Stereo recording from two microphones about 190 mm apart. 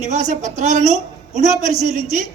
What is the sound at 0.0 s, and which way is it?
A woman's voice, 40° right (ahead or behind).